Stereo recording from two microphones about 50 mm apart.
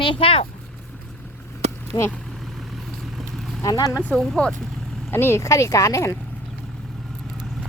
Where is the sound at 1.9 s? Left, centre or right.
Left.